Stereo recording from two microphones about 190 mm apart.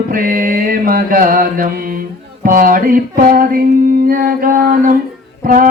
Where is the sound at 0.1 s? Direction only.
45° right (ahead or behind).